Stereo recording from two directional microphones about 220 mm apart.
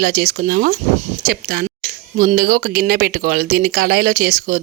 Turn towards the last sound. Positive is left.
turn(degrees=-40)  # may be behind; listen again after turning